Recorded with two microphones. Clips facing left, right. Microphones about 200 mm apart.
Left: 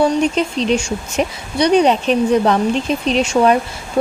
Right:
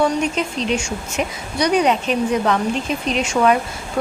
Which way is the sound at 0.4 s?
35° left (ahead or behind).